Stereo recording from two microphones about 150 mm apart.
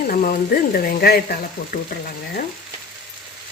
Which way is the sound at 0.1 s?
70° left (ahead or behind).